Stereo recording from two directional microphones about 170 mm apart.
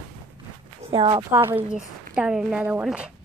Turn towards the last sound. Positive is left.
turn(degrees=-5)  # may be behind; listen again after turning